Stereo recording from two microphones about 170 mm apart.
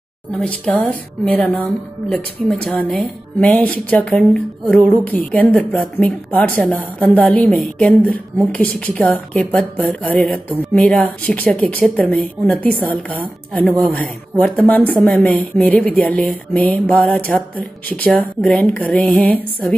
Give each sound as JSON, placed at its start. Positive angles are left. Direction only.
{"t": 0.4, "sound": "speech", "side_deg": 10}